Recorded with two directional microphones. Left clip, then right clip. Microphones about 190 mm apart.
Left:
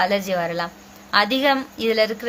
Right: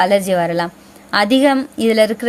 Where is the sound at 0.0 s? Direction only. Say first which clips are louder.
Right 7 dB; 45° right (ahead or behind).